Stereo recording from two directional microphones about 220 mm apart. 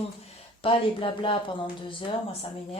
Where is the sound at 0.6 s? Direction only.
25° left (ahead or behind).